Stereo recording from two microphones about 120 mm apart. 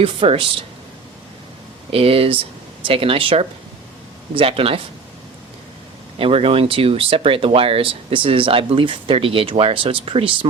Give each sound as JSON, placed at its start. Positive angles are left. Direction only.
{"t": 0.0, "sound": "speech", "side_deg": -50}
{"t": 1.9, "sound": "speech", "side_deg": -55}
{"t": 6.1, "sound": "speech", "side_deg": -50}